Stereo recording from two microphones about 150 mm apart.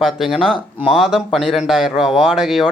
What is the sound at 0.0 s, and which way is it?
Speech, centre (ahead or behind).